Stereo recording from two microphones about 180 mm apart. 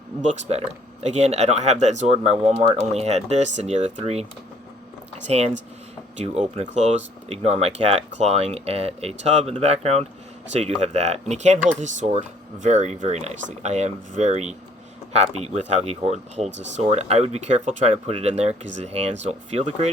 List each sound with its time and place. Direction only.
0.2 s speech: 40° right (ahead or behind)
6.1 s speech: 40° right (ahead or behind)